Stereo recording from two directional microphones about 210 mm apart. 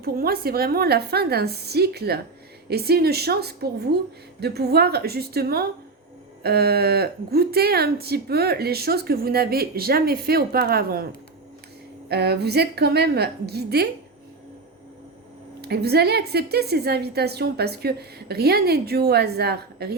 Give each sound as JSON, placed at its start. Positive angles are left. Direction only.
{"t": 0.0, "sound": "a woman's voice", "side_deg": -45}
{"t": 12.0, "sound": "a woman's voice", "side_deg": -50}
{"t": 15.6, "sound": "a woman's voice", "side_deg": -50}